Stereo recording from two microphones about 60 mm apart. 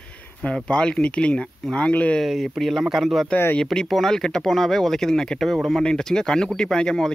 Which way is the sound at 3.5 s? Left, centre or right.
Centre.